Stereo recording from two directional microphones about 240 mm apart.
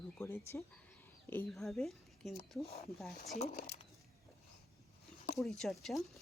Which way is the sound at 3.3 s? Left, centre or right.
Left.